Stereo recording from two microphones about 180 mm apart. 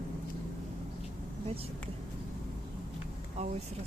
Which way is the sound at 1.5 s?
35° right (ahead or behind).